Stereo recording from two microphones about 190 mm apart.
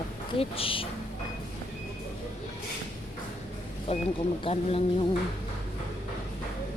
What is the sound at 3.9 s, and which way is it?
Speech, 35° left (ahead or behind).